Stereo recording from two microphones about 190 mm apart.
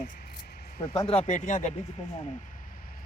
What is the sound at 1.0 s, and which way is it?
Speech, 35° left (ahead or behind).